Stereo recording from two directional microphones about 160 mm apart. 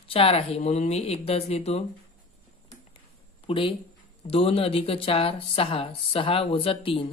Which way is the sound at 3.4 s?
35° left (ahead or behind).